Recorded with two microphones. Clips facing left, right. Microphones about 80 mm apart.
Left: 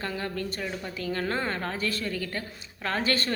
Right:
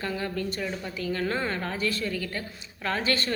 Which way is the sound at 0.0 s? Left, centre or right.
Left.